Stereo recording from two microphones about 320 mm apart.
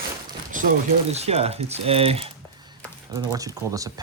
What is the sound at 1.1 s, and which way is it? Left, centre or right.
Speech, centre.